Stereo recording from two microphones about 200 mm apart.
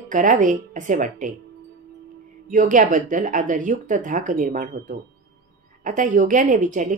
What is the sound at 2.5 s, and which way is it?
A woman's voice, 40° right (ahead or behind).